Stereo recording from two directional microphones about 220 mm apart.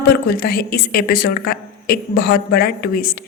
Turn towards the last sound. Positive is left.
turn(degrees=45)  # may be behind; listen again after turning